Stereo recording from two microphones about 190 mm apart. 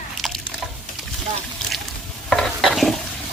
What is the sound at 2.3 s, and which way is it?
Stir, centre (ahead or behind).